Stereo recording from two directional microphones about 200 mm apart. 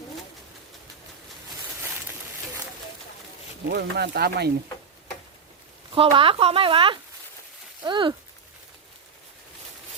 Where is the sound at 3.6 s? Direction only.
55° right (ahead or behind).